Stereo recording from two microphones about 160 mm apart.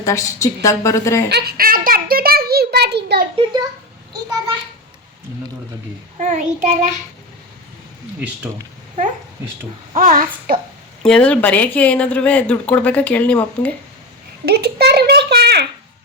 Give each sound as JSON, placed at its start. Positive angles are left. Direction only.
{"t": 0.0, "sound": "a woman's voice", "side_deg": 20}
{"t": 1.3, "sound": "a sound", "side_deg": -85}
{"t": 3.3, "sound": "a child's voice", "side_deg": -25}
{"t": 6.1, "sound": "child singing", "side_deg": -50}
{"t": 9.9, "sound": "a child's voice", "side_deg": -45}
{"t": 10.2, "sound": "speech", "side_deg": -65}
{"t": 11.0, "sound": "speech", "side_deg": 5}
{"t": 14.4, "sound": "a child's voice", "side_deg": -80}